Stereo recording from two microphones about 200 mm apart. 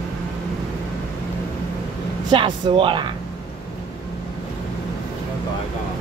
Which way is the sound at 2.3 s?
25° right (ahead or behind).